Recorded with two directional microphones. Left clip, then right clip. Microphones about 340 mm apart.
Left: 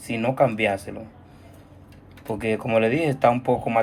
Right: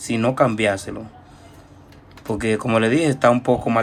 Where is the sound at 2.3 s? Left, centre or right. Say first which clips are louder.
Right 3 dB; centre.